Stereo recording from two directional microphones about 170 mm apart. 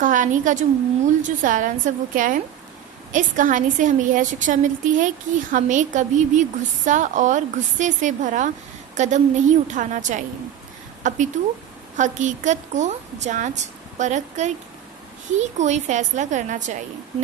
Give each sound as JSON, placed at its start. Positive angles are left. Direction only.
{"t": 0.0, "sound": "a woman's voice", "side_deg": -50}